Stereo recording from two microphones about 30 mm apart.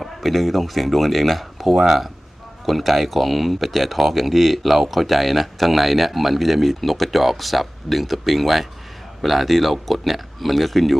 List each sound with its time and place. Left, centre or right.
0.0 s speech: centre
1.7 s speech: centre
2.6 s speech: centre